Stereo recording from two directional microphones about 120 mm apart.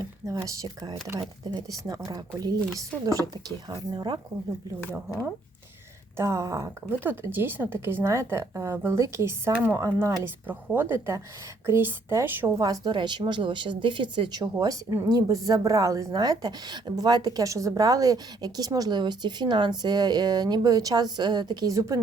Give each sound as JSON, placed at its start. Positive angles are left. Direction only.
{"t": 0.0, "sound": "a woman's voice", "side_deg": -25}
{"t": 3.7, "sound": "a woman's voice", "side_deg": -35}
{"t": 6.1, "sound": "speech", "side_deg": -25}
{"t": 12.6, "sound": "a woman's voice", "side_deg": -30}
{"t": 14.4, "sound": "a woman's voice", "side_deg": -30}